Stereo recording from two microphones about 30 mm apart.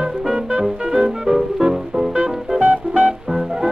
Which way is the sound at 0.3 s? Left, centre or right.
Right.